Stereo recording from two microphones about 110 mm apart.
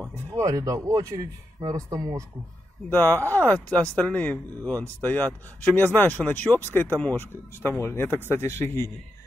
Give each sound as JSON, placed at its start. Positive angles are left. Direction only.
{"t": 0.1, "sound": "speech", "side_deg": -30}
{"t": 2.9, "sound": "speech", "side_deg": 20}